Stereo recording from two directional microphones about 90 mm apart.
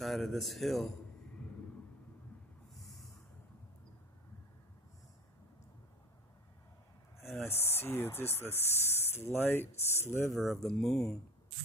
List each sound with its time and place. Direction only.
0.0 s speech: centre (ahead or behind)
2.7 s snort: centre (ahead or behind)
7.4 s speech: 25° left (ahead or behind)
10.3 s speech: centre (ahead or behind)